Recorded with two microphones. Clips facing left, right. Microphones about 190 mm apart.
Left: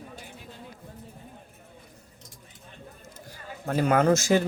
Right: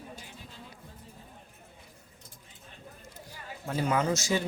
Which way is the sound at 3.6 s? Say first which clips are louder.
Left 6 dB; 60° left (ahead or behind).